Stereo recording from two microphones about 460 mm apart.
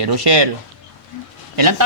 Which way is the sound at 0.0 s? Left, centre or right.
Right.